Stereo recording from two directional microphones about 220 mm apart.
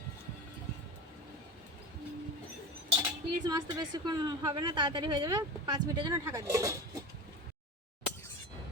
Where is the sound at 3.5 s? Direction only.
20° right (ahead or behind).